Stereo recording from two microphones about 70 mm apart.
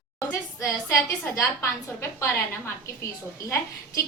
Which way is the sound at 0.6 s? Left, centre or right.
Left.